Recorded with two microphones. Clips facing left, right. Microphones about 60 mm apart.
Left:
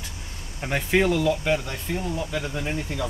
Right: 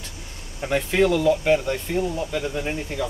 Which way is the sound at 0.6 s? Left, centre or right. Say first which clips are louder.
Right 2 dB; centre.